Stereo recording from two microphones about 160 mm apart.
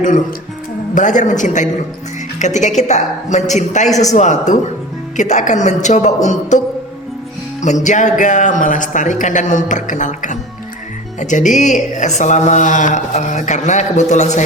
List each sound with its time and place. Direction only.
0.9 s speech: 50° left (ahead or behind)
7.6 s speech: 50° left (ahead or behind)